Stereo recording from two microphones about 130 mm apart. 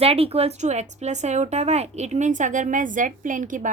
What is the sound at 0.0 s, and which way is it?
A woman's voice, 50° right (ahead or behind).